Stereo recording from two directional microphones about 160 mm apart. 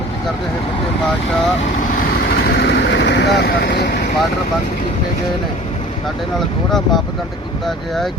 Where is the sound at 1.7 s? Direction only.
70° left (ahead or behind); by 4.0 s 90° left.